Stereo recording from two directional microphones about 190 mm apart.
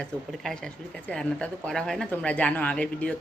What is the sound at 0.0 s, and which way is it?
A woman's voice, 5° left (ahead or behind).